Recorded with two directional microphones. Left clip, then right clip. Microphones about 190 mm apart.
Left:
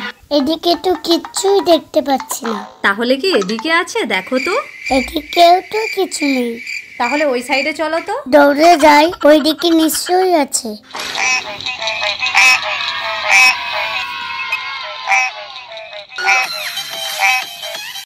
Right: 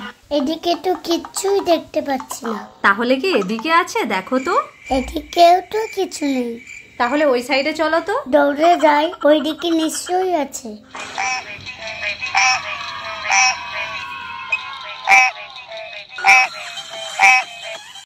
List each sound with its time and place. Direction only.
0.0 s a child's voice: 20° left (ahead or behind)
4.8 s insect: 10° right (ahead or behind)
5.5 s a child's voice: 5° left (ahead or behind)
7.0 s a child's voice: 5° left (ahead or behind)
8.4 s a child's voice: 20° left (ahead or behind)
11.0 s a sound: 35° left (ahead or behind)
15.0 s frog: 5° left (ahead or behind)
16.3 s music: 5° left (ahead or behind)